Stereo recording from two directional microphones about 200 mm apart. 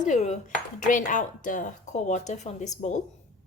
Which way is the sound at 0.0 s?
35° left (ahead or behind).